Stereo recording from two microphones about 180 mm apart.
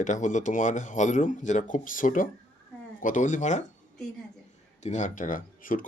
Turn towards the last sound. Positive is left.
turn(degrees=50)  # may be behind; listen again after turning